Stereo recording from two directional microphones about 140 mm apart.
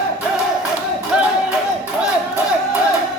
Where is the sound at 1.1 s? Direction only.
5° right (ahead or behind).